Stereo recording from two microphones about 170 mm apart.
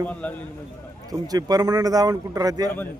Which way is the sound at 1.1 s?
20° right (ahead or behind).